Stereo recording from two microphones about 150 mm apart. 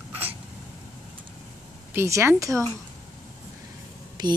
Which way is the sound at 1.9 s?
15° right (ahead or behind).